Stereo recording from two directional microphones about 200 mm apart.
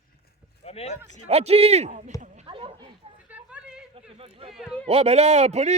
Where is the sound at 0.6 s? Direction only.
30° left (ahead or behind).